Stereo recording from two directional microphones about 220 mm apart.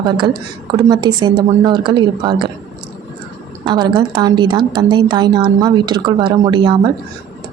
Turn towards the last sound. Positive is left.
turn(degrees=-20)  # may be behind; listen again after turning